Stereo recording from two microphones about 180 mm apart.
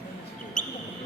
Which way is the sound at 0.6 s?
45° left (ahead or behind).